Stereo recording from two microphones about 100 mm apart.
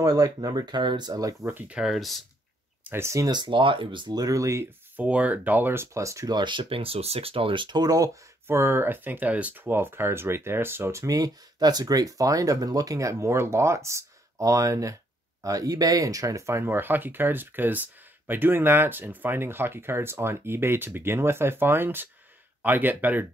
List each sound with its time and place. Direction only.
0.0 s speech: 40° right (ahead or behind)
1.4 s speech: 20° right (ahead or behind)
1.8 s speech: centre (ahead or behind)
2.8 s speech: 25° right (ahead or behind)
3.3 s speech: 50° right (ahead or behind)
4.2 s speech: 35° right (ahead or behind)
4.9 s speech: 15° right (ahead or behind); by 6.3 s 30° right (ahead or behind)
6.3 s speech: 50° right (ahead or behind)
8.5 s speech: 20° right (ahead or behind)